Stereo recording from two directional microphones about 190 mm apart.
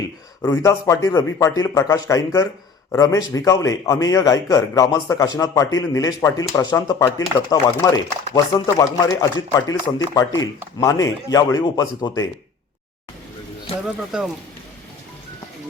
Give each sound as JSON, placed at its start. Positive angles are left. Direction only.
{"t": 0.4, "sound": "a man's voice", "side_deg": 15}
{"t": 14.1, "sound": "speech", "side_deg": -5}